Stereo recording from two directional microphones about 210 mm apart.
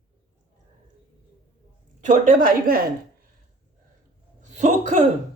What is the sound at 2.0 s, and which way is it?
Speech, 40° right (ahead or behind).